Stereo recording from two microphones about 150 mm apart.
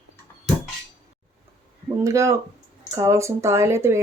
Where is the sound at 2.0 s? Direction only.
20° right (ahead or behind).